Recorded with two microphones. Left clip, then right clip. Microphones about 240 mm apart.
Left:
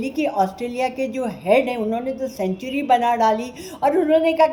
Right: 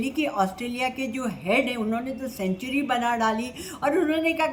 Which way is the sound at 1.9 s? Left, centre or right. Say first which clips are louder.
Left 6 dB; centre.